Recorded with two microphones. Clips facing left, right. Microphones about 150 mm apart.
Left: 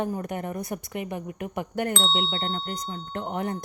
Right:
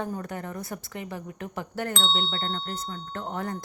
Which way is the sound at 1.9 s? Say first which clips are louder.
Left 2 dB; centre (ahead or behind).